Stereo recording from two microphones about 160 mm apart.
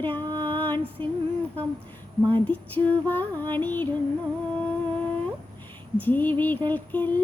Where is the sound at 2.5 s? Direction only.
10° left (ahead or behind).